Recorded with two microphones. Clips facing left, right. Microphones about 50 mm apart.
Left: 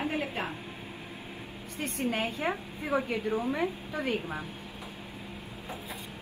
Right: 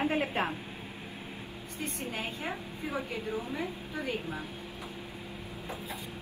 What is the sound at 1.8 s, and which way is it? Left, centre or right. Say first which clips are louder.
A woman's voice: left 6 dB; left.